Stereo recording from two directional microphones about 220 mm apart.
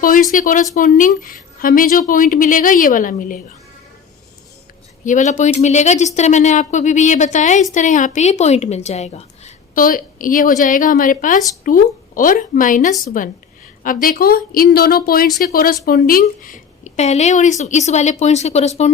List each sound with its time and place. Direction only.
0.3 s a woman's voice: 35° left (ahead or behind)
5.0 s a woman's voice: 35° left (ahead or behind)